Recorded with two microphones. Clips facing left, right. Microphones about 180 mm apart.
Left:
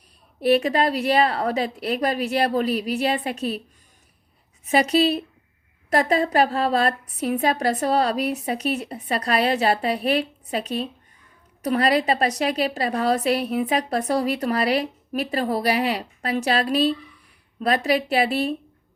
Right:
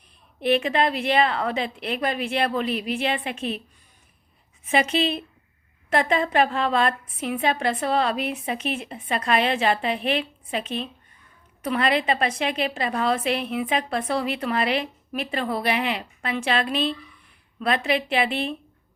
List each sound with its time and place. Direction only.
0.4 s a woman's voice: 40° left (ahead or behind)
4.6 s a woman's voice: 40° left (ahead or behind)